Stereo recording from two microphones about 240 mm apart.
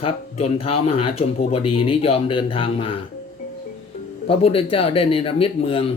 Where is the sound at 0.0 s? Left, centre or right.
Left.